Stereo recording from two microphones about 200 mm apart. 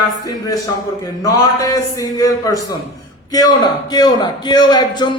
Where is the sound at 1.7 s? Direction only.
15° left (ahead or behind).